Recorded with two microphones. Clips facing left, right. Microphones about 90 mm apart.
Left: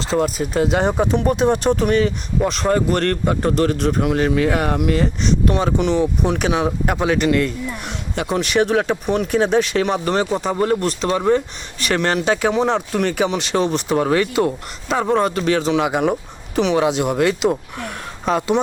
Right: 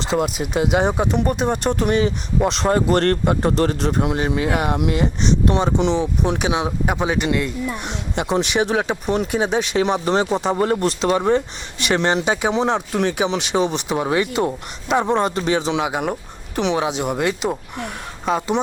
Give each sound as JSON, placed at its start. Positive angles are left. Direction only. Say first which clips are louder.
{"t": 0.1, "sound": "speech", "louder": "left 2 dB", "side_deg": -15}
{"t": 2.5, "sound": "speech", "louder": "right 1 dB", "side_deg": -30}
{"t": 4.4, "sound": "speech", "louder": "left 2 dB", "side_deg": -10}
{"t": 4.7, "sound": "speech", "louder": "left 1 dB", "side_deg": -20}
{"t": 6.7, "sound": "speech", "louder": "left 2 dB", "side_deg": -5}
{"t": 7.0, "sound": "speech", "louder": "left 5 dB", "side_deg": -15}
{"t": 7.9, "sound": "speech", "louder": "left 1 dB", "side_deg": -25}
{"t": 15.1, "sound": "speech", "louder": "left 2 dB", "side_deg": -20}
{"t": 15.8, "sound": "speech", "louder": "left 4 dB", "side_deg": -5}
{"t": 17.0, "sound": "speech", "louder": "left 4 dB", "side_deg": 0}